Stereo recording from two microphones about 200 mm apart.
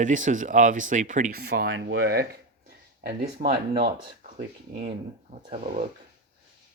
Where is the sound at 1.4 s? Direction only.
50° right (ahead or behind).